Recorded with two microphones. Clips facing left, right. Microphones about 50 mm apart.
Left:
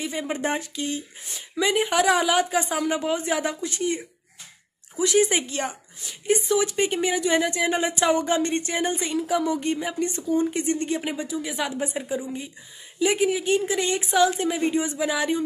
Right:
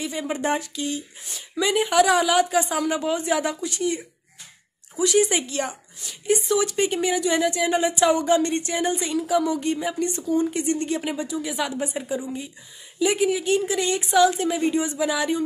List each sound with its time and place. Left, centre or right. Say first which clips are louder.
0.0 s a woman's voice: right 1 dB; left